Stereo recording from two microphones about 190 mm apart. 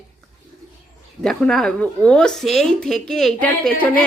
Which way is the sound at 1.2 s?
5° left (ahead or behind).